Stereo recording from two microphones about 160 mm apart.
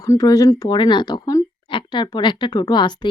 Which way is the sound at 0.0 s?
20° left (ahead or behind).